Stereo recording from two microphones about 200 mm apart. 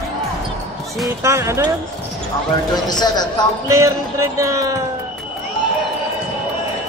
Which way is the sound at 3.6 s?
15° right (ahead or behind).